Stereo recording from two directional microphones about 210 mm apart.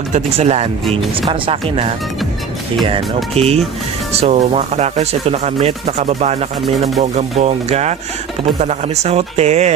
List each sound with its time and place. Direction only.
0.1 s speech: 30° right (ahead or behind)
0.8 s speech: centre (ahead or behind)
1.3 s speech: 25° right (ahead or behind)
3.3 s speech: 30° right (ahead or behind)